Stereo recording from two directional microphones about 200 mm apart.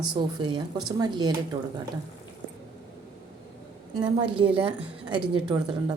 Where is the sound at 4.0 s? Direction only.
25° right (ahead or behind).